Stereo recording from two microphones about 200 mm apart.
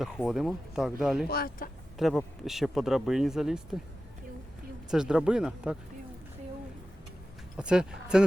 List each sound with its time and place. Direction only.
0.0 s speech: centre (ahead or behind)
1.3 s speech: 45° left (ahead or behind)
2.0 s speech: centre (ahead or behind)
4.9 s speech: 5° right (ahead or behind)
7.5 s speech: 5° right (ahead or behind)